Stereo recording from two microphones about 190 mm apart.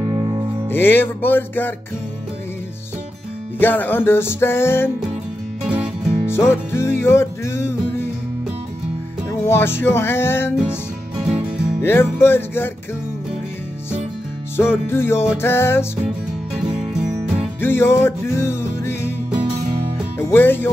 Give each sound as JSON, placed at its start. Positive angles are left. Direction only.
{"t": 0.0, "sound": "music", "side_deg": -20}
{"t": 0.7, "sound": "music", "side_deg": 10}
{"t": 3.5, "sound": "music", "side_deg": 10}
{"t": 6.2, "sound": "music", "side_deg": 15}
{"t": 9.5, "sound": "music", "side_deg": 10}
{"t": 10.5, "sound": "music", "side_deg": -5}
{"t": 11.8, "sound": "music", "side_deg": 10}
{"t": 14.6, "sound": "music", "side_deg": 10}
{"t": 16.6, "sound": "music", "side_deg": -5}
{"t": 17.6, "sound": "music", "side_deg": 10}
{"t": 20.2, "sound": "speech", "side_deg": 10}